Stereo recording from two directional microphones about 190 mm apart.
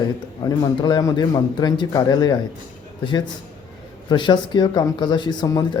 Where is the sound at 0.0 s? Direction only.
20° left (ahead or behind).